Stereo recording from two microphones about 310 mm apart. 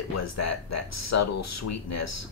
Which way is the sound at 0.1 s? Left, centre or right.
Left.